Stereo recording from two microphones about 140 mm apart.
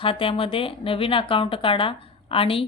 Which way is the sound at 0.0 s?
40° left (ahead or behind).